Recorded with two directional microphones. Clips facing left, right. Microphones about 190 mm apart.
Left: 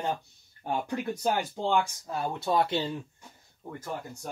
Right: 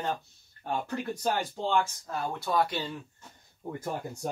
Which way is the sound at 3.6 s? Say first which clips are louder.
Right 4 dB; 10° right (ahead or behind).